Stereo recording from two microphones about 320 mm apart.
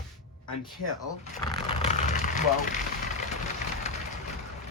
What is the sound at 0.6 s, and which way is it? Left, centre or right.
Speech, centre.